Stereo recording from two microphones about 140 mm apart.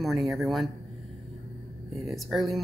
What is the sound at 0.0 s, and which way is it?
Speech, centre (ahead or behind).